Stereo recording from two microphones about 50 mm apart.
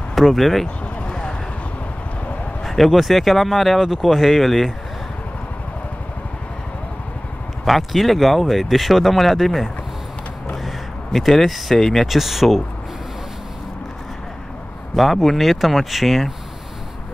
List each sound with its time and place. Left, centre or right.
0.1 s speech: centre
1.0 s vehicle: centre
2.6 s speech: centre
7.6 s speech: centre
15.0 s speech: centre